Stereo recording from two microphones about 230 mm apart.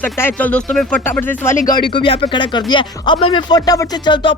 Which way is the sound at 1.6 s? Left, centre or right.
Centre.